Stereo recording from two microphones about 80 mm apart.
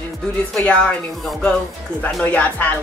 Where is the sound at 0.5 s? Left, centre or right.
Centre.